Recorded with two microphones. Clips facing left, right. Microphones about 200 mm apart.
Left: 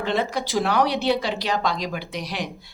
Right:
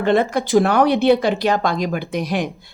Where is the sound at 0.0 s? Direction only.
50° right (ahead or behind).